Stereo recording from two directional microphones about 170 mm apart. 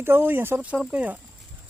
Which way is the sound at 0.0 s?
15° right (ahead or behind).